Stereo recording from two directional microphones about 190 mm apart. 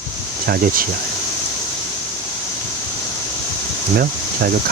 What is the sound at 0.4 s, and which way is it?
Speech, 55° right (ahead or behind).